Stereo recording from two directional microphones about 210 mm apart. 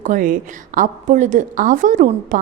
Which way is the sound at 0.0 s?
40° right (ahead or behind).